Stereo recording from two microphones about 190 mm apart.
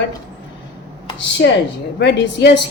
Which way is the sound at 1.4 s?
70° left (ahead or behind).